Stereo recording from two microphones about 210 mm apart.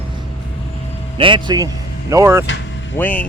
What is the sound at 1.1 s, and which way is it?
Speech, 25° right (ahead or behind).